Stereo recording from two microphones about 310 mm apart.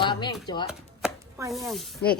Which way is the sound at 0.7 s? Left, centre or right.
Centre.